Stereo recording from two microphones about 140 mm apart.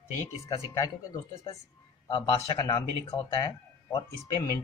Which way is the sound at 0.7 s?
25° left (ahead or behind).